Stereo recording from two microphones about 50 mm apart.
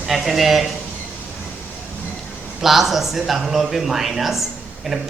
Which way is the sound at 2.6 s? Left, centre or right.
Centre.